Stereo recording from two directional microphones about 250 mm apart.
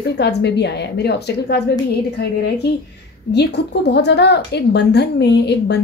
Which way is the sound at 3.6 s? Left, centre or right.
Left.